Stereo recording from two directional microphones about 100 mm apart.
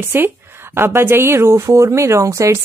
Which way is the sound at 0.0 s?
20° right (ahead or behind).